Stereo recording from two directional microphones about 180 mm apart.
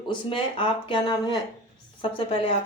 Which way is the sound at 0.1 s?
30° left (ahead or behind).